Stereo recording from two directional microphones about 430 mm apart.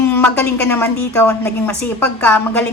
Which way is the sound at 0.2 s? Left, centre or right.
Centre.